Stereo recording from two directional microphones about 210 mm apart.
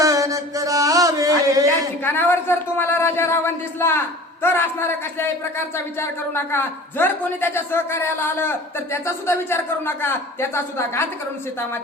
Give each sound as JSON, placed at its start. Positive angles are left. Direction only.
{"t": 0.0, "sound": "mantra", "side_deg": -15}
{"t": 2.0, "sound": "speech", "side_deg": 10}